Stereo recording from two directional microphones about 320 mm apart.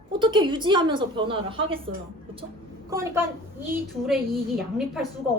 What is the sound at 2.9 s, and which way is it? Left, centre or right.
A woman's voice, centre.